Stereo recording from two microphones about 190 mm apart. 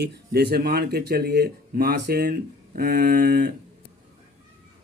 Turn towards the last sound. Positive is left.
turn(degrees=-55)  # may be behind; listen again after turning